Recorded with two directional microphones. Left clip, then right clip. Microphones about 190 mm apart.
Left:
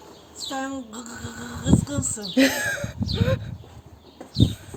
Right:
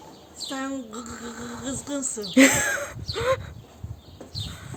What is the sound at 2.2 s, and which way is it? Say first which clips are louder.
Speech: right 3 dB; 25° right (ahead or behind).